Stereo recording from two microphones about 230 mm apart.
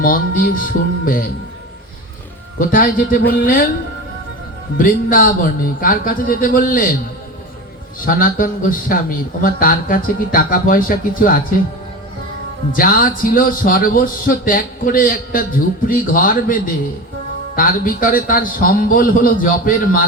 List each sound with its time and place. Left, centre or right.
0.0 s a man's voice: left
2.6 s a man's voice: left
4.8 s a man's voice: left
8.0 s a man's voice: left
12.7 s a man's voice: left